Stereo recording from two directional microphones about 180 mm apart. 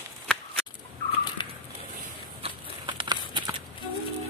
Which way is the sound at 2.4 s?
30° right (ahead or behind).